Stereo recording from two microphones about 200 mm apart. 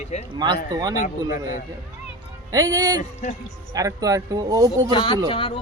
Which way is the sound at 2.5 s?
15° right (ahead or behind).